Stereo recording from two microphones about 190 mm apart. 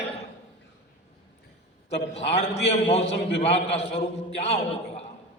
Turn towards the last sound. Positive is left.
turn(degrees=30)  # may be behind; listen again after turning